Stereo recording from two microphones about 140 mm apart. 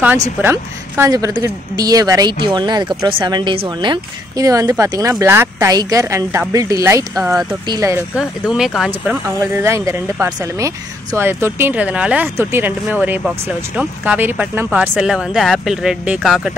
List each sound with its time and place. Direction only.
0.4 s a woman's voice: 15° right (ahead or behind)
8.2 s speech: 5° right (ahead or behind)
9.4 s a woman's voice: 20° right (ahead or behind); by 16.5 s centre (ahead or behind)